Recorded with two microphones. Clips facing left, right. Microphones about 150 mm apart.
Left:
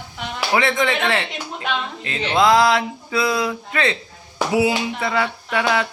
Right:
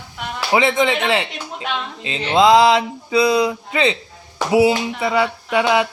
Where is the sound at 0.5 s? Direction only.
20° right (ahead or behind).